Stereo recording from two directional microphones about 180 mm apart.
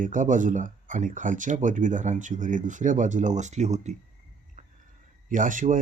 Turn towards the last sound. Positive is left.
turn(degrees=-45)  # may be behind; listen again after turning